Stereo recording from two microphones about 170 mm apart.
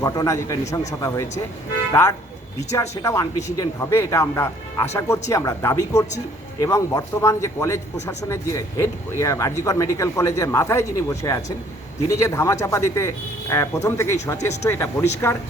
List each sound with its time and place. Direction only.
0.0 s a man's voice: 20° left (ahead or behind)